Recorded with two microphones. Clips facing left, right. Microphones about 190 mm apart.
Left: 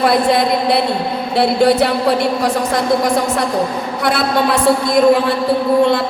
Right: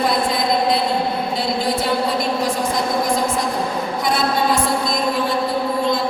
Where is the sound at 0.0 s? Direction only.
65° left (ahead or behind).